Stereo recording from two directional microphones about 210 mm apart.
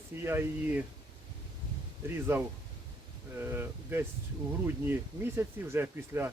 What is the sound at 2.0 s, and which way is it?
Speech, 10° right (ahead or behind).